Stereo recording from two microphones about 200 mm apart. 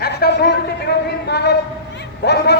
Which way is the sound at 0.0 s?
55° left (ahead or behind).